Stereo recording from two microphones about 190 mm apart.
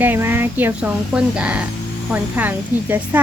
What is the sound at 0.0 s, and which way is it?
Speech, 10° right (ahead or behind).